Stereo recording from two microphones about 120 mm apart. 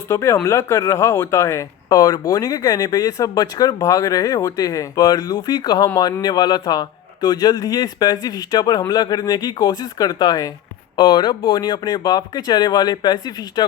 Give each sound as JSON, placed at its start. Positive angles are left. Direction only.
{"t": 0.1, "sound": "speech", "side_deg": 25}